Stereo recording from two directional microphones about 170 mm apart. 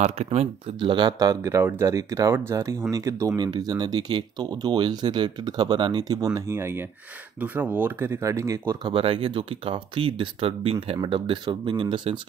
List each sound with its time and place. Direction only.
0.0 s speech: 40° right (ahead or behind); by 8.9 s 20° right (ahead or behind)
8.9 s speech: 35° right (ahead or behind)